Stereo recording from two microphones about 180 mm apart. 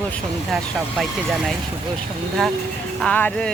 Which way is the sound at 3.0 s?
10° left (ahead or behind).